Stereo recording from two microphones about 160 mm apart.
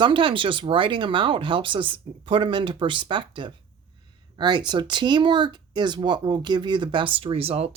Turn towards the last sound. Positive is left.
turn(degrees=-40)  # may be behind; listen again after turning